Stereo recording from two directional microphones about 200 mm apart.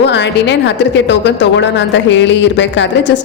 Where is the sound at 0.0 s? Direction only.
60° left (ahead or behind).